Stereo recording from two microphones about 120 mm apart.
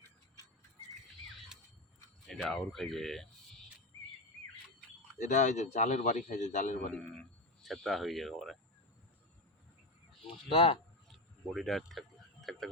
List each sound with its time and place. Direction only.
2.2 s speech: 5° left (ahead or behind)
5.2 s a man's voice: 85° left
6.9 s speech: 5° left (ahead or behind)
10.2 s speech: 50° left (ahead or behind)
11.1 s a sound: centre (ahead or behind)